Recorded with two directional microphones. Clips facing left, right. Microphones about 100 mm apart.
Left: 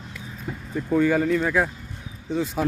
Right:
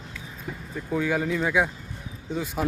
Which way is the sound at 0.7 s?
Centre (ahead or behind).